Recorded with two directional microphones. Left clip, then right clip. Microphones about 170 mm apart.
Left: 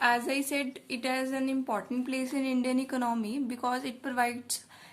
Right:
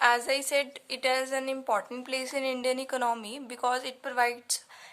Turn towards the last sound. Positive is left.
turn(degrees=-25)  # may be behind; listen again after turning